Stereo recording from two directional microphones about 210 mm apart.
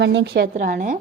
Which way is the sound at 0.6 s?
40° right (ahead or behind).